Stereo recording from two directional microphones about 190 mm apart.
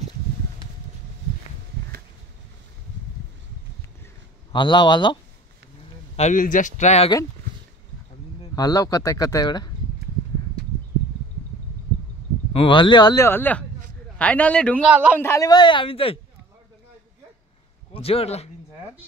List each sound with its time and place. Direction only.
4.5 s speech: 25° left (ahead or behind)
6.1 s speech: 40° left (ahead or behind)
8.4 s speech: 20° left (ahead or behind)
12.5 s speech: 25° left (ahead or behind); by 14.8 s 5° left (ahead or behind)
14.9 s a man's voice: 5° right (ahead or behind)
15.1 s speech: 15° left (ahead or behind); by 16.2 s 30° left (ahead or behind)
17.9 s speech: 30° left (ahead or behind)